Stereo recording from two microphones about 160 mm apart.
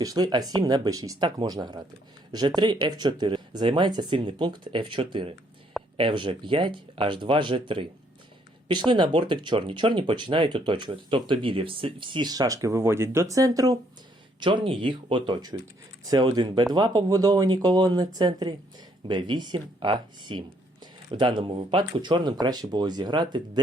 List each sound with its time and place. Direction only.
0.0 s speech: 25° right (ahead or behind)
8.6 s speech: 30° right (ahead or behind)